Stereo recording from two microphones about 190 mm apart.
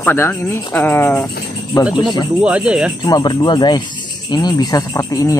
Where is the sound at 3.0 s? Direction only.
20° left (ahead or behind).